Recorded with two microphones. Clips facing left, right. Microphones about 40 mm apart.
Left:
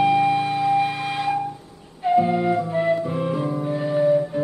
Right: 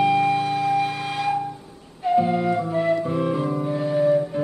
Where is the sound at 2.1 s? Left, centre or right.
Centre.